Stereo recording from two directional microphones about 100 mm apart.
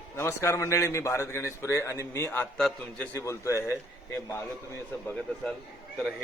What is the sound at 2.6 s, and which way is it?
Speech, 5° left (ahead or behind).